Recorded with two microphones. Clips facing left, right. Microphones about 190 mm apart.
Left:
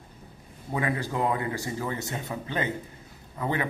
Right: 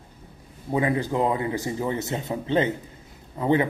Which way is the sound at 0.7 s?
20° right (ahead or behind).